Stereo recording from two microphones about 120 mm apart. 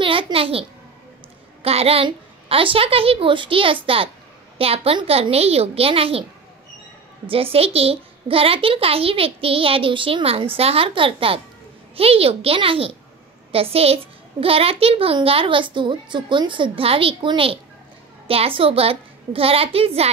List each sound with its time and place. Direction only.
0.0 s a child's voice: 45° right (ahead or behind)
7.5 s a child's voice: 55° right (ahead or behind)